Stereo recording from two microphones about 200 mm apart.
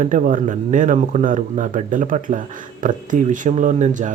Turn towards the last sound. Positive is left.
turn(degrees=-40)  # may be behind; listen again after turning